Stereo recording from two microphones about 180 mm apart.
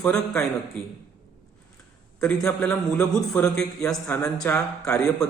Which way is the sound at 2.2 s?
5° left (ahead or behind).